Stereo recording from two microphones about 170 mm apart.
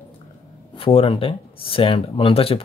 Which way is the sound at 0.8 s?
30° left (ahead or behind).